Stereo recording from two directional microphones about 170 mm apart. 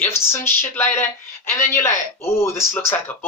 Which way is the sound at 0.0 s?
15° left (ahead or behind).